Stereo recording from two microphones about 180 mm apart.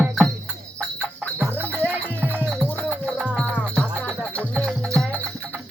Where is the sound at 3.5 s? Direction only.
5° left (ahead or behind).